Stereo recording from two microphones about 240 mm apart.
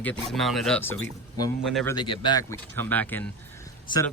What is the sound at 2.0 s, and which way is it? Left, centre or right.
Speech, centre.